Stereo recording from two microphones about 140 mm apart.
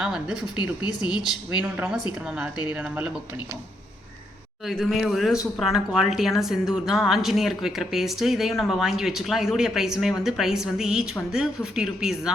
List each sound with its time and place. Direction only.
0.0 s speech: 5° right (ahead or behind)
0.5 s speech: 35° left (ahead or behind)
1.7 s speech: 5° right (ahead or behind)
4.6 s a woman's voice: centre (ahead or behind)